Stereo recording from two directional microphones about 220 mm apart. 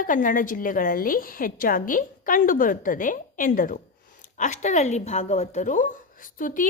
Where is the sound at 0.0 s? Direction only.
35° left (ahead or behind).